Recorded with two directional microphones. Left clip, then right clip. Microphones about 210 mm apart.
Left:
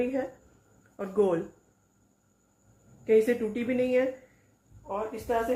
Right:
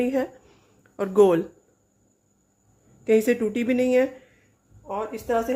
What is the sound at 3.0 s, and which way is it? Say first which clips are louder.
Speech: right 3 dB; 55° right (ahead or behind).